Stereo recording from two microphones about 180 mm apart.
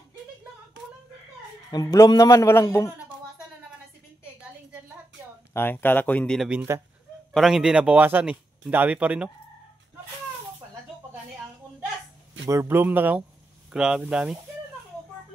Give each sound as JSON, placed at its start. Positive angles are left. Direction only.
{"t": 1.7, "sound": "a man's voice", "side_deg": 20}
{"t": 5.5, "sound": "a man's voice", "side_deg": 10}
{"t": 12.4, "sound": "speech", "side_deg": -15}